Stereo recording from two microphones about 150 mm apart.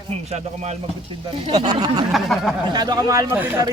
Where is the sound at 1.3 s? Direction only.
35° right (ahead or behind).